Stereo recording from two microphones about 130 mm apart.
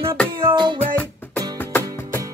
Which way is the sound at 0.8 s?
15° left (ahead or behind).